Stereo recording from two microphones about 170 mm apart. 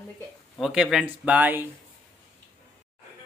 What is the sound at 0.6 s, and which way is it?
A man's voice, 5° right (ahead or behind).